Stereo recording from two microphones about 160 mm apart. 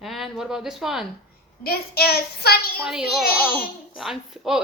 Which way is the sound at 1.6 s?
75° left (ahead or behind).